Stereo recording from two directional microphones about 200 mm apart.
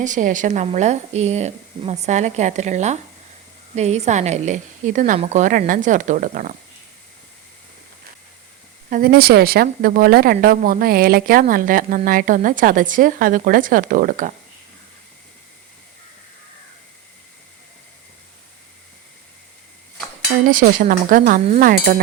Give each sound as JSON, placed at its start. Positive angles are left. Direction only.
{"t": 0.0, "sound": "speech", "side_deg": -40}
{"t": 8.9, "sound": "speech", "side_deg": -45}
{"t": 20.5, "sound": "speech", "side_deg": -45}